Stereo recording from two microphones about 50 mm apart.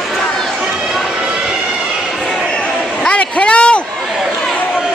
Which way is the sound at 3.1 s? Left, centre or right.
Left.